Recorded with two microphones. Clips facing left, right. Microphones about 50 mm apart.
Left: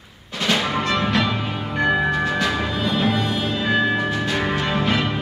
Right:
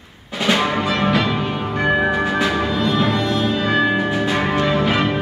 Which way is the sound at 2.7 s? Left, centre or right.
Centre.